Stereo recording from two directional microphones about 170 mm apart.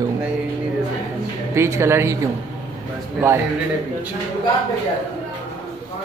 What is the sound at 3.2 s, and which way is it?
Speech, 10° right (ahead or behind).